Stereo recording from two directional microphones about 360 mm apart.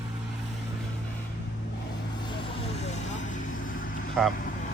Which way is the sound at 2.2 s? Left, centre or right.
Centre.